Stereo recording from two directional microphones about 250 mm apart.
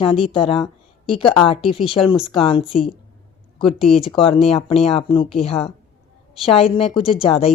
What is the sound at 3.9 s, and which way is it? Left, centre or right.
Speech, left.